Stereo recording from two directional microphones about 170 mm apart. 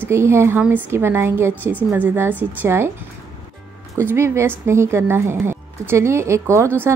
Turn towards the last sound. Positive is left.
turn(degrees=-15)  # may be behind; listen again after turning